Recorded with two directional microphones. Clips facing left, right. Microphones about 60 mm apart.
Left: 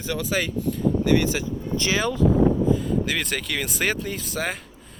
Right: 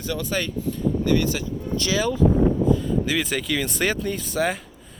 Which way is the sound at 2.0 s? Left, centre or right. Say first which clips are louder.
Right 1 dB; left.